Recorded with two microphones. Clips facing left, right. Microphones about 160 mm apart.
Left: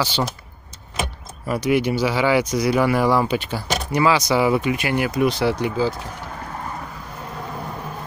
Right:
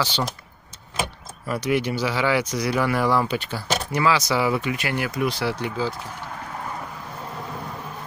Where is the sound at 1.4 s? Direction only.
15° left (ahead or behind).